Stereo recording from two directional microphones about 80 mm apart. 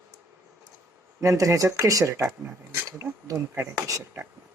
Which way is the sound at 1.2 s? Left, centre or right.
Right.